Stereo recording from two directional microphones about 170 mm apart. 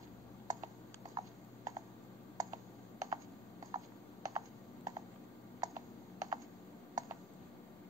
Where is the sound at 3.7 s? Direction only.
20° right (ahead or behind).